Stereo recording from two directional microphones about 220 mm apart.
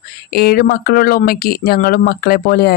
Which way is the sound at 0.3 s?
45° left (ahead or behind).